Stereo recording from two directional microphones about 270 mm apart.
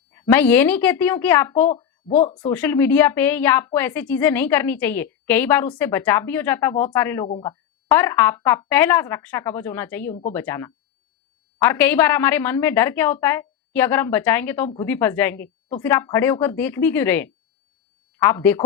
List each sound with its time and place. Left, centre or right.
0.1 s a woman's voice: centre
2.0 s speech: left
2.4 s a woman's voice: centre